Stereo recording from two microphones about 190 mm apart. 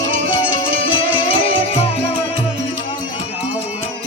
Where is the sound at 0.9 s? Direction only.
25° left (ahead or behind).